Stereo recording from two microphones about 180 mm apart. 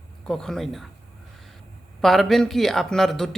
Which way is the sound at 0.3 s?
5° left (ahead or behind).